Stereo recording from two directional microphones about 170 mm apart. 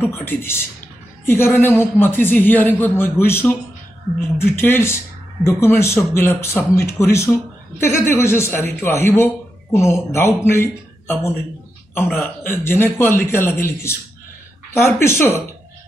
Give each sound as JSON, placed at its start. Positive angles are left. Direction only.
{"t": 0.0, "sound": "a man's voice", "side_deg": 15}